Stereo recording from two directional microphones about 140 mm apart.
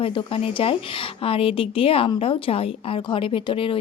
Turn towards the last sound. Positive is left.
turn(degrees=40)  # may be behind; listen again after turning